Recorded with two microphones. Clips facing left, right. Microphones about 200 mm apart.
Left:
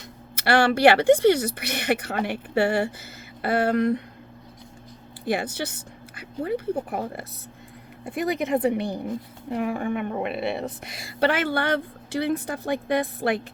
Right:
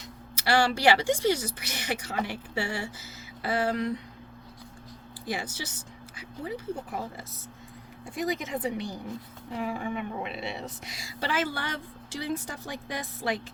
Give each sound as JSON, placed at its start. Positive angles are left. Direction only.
{"t": 0.3, "sound": "a woman's voice", "side_deg": 60}
{"t": 5.2, "sound": "a woman's voice", "side_deg": 60}